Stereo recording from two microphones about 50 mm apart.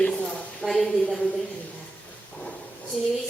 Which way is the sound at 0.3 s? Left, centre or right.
Centre.